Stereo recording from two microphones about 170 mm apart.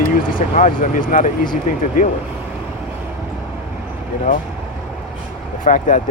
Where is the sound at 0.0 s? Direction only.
55° left (ahead or behind).